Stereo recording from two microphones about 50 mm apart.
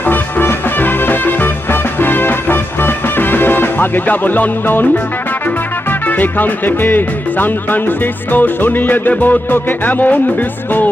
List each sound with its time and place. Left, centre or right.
0.0 s music: left
5.9 s music: left